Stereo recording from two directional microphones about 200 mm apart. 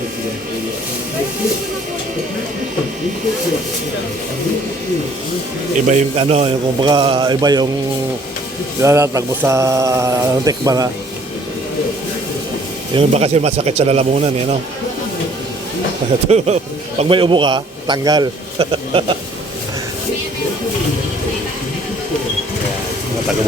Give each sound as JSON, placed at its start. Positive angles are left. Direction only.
{"t": 5.9, "sound": "speech", "side_deg": -30}
{"t": 8.8, "sound": "speech", "side_deg": -15}
{"t": 12.9, "sound": "speech", "side_deg": -30}
{"t": 16.3, "sound": "speech", "side_deg": -30}